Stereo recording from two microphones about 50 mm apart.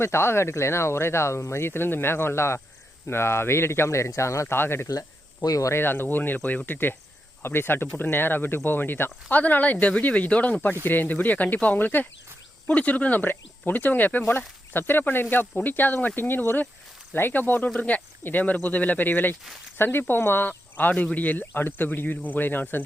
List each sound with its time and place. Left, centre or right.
0.0 s speech: left
5.5 s speech: left
5.8 s speech: left
7.4 s speech: left
9.3 s speech: left
10.8 s speech: left